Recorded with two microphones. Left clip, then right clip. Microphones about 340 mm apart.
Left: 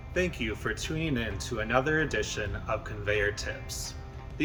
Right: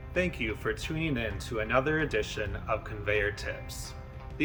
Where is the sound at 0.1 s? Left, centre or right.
Centre.